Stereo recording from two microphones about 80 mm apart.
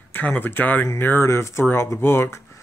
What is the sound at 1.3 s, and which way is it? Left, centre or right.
Speech, left.